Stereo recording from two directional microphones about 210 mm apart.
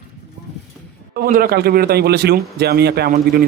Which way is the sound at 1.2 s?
45° right (ahead or behind).